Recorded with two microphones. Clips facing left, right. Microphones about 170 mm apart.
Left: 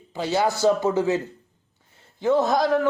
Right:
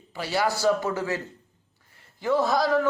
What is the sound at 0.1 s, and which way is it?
A man's voice, 20° left (ahead or behind).